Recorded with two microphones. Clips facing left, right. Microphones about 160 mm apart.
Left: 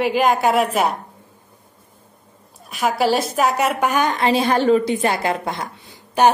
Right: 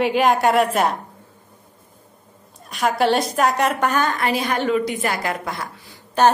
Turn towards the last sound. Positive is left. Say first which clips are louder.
# left 1 dB
turn(degrees=10)  # may be behind; listen again after turning